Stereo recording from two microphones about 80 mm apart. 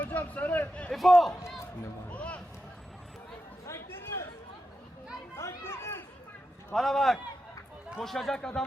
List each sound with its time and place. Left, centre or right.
0.0 s a sound: left
0.9 s speech: centre
2.0 s a sound: centre
3.7 s chatter: left
5.4 s children playing: left
6.7 s speech: centre